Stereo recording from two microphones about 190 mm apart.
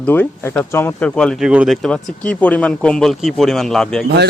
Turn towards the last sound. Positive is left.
turn(degrees=5)  # may be behind; listen again after turning